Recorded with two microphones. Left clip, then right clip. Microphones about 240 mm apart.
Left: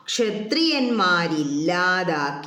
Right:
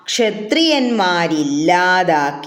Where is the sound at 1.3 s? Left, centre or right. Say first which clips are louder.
Right 7 dB; centre.